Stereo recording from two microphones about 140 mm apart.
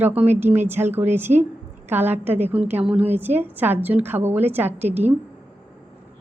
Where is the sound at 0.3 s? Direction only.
15° right (ahead or behind).